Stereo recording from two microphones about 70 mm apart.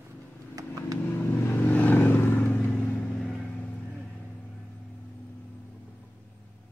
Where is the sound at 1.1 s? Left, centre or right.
Left.